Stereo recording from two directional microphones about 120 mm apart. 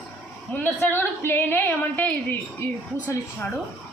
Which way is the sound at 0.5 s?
15° left (ahead or behind).